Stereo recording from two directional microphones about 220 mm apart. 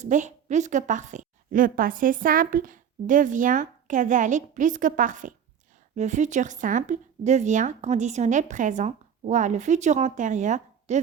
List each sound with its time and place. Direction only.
0.0 s a woman's voice: 35° right (ahead or behind)